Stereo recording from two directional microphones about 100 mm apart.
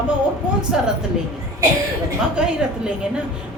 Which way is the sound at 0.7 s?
5° right (ahead or behind).